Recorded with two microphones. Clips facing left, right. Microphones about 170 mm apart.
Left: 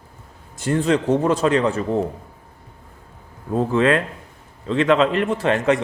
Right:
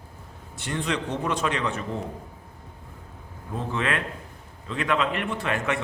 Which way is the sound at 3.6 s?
35° left (ahead or behind).